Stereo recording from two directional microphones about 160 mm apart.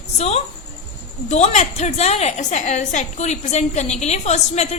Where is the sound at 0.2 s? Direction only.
40° left (ahead or behind).